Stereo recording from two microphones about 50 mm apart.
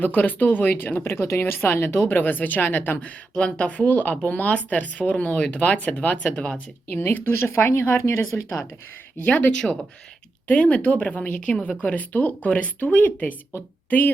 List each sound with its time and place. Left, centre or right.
0.0 s speech: left
1.0 s a woman's voice: left
3.3 s speech: centre
7.0 s speech: left
7.3 s speech: left
7.9 s speech: left
9.2 s speech: left
10.5 s speech: left
11.8 s speech: left